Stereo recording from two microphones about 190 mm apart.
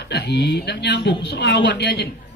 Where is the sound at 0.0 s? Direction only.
60° left (ahead or behind).